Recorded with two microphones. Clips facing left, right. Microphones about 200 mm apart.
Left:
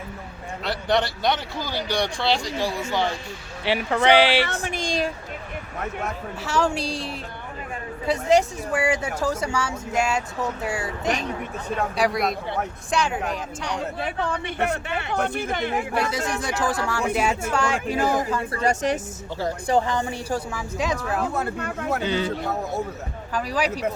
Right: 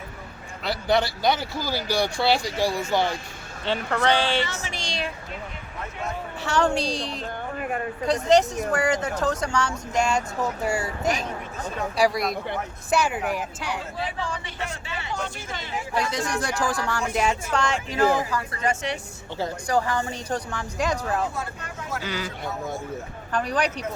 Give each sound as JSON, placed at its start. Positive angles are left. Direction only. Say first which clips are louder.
{"t": 0.6, "sound": "a man's voice", "louder": "even", "side_deg": 0}
{"t": 3.7, "sound": "speech", "louder": "left 3 dB", "side_deg": 10}
{"t": 4.4, "sound": "speech", "louder": "left 4 dB", "side_deg": 55}
{"t": 6.4, "sound": "speech", "louder": "right 1 dB", "side_deg": 5}
{"t": 14.0, "sound": "speech", "louder": "left 4 dB", "side_deg": 60}
{"t": 16.1, "sound": "speech", "louder": "even", "side_deg": 5}
{"t": 18.3, "sound": "speech", "louder": "left 3 dB", "side_deg": 25}
{"t": 18.6, "sound": "speech", "louder": "left 5 dB", "side_deg": 40}
{"t": 19.6, "sound": "speech", "louder": "left 2 dB", "side_deg": 30}
{"t": 20.0, "sound": "speech", "louder": "left 2 dB", "side_deg": 10}
{"t": 21.3, "sound": "speech", "louder": "left 7 dB", "side_deg": 60}
{"t": 22.0, "sound": "speech", "louder": "left 6 dB", "side_deg": 25}
{"t": 23.3, "sound": "speech", "louder": "even", "side_deg": 5}